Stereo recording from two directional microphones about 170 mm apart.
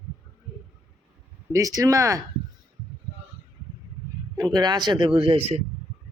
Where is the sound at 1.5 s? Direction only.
20° right (ahead or behind).